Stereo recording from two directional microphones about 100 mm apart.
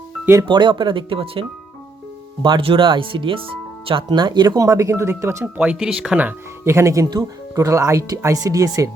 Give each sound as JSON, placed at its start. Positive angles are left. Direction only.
{"t": 0.4, "sound": "speech", "side_deg": -50}
{"t": 2.4, "sound": "speech", "side_deg": -55}
{"t": 5.5, "sound": "speech", "side_deg": -10}
{"t": 6.7, "sound": "speech", "side_deg": -30}